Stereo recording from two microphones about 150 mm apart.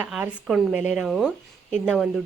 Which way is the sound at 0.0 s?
10° right (ahead or behind).